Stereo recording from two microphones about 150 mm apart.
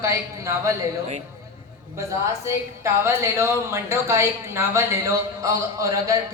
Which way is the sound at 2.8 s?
15° right (ahead or behind).